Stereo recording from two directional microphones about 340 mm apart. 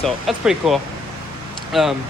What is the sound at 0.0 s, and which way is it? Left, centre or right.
Speech, centre.